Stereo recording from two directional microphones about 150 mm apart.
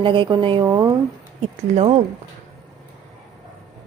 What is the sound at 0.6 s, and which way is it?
Speech, 20° right (ahead or behind).